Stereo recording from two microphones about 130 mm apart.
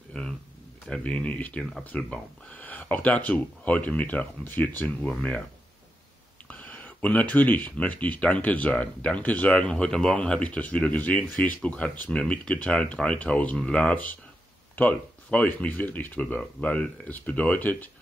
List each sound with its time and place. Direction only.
0.1 s a sound: 5° left (ahead or behind)
0.8 s speech: 10° left (ahead or behind)
6.4 s speech: 10° left (ahead or behind)